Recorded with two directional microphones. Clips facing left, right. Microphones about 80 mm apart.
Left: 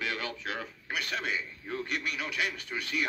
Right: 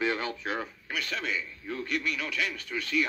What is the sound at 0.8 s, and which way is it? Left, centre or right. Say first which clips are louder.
A man's voice: left 2 dB; left.